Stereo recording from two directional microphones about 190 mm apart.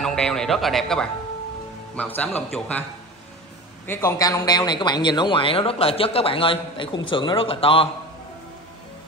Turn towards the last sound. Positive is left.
turn(degrees=30)  # may be behind; listen again after turning